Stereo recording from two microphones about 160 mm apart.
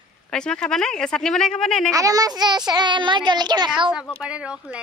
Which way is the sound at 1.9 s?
20° right (ahead or behind).